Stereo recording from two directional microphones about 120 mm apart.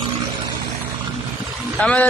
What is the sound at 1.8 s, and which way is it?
Speech, 10° left (ahead or behind).